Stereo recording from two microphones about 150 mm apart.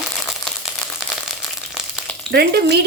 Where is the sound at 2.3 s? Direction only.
90° right.